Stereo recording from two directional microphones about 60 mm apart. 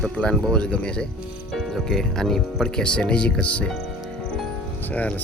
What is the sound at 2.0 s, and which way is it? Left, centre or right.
Speech, centre.